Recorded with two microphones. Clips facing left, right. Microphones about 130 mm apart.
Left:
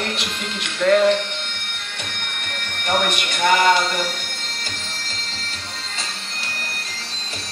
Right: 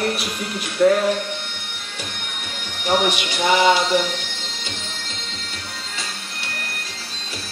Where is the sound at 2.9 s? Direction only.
55° left (ahead or behind).